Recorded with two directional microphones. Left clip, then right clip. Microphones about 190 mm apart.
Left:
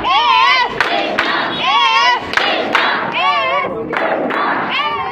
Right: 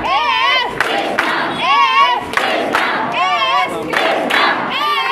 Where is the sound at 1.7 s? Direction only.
20° right (ahead or behind).